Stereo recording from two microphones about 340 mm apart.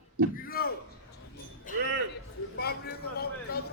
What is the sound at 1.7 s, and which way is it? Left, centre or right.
Music, left.